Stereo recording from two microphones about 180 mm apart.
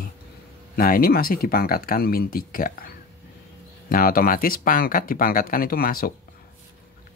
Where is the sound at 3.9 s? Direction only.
55° left (ahead or behind).